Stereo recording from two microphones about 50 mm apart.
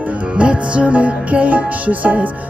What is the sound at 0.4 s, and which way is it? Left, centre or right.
Music, right.